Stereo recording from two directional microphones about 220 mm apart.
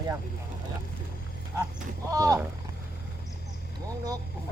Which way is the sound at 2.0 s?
15° right (ahead or behind).